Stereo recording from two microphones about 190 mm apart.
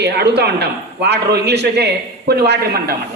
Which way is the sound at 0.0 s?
60° right (ahead or behind).